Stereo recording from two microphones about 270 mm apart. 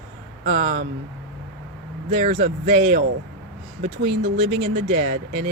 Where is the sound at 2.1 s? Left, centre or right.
Right.